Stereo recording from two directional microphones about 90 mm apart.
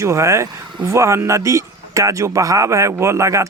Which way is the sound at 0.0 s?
35° right (ahead or behind).